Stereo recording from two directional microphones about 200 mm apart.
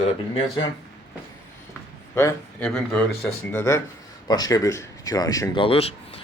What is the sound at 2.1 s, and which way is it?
A man's voice, 10° left (ahead or behind).